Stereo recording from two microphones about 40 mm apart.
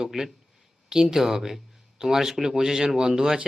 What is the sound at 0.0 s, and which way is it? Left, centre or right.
Speech, centre.